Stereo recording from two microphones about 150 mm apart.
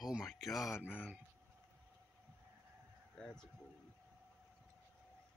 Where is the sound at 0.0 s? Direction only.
Centre (ahead or behind).